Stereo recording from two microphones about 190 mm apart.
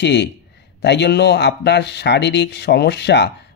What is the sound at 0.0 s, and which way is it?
Speech, 65° left (ahead or behind).